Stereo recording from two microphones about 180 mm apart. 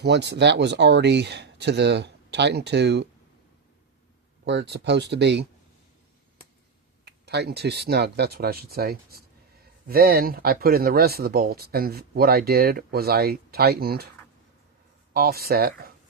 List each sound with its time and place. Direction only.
0.0 s speech: 70° right (ahead or behind)
4.4 s speech: 70° right (ahead or behind)
7.0 s speech: 65° right (ahead or behind)
15.1 s speech: 60° right (ahead or behind)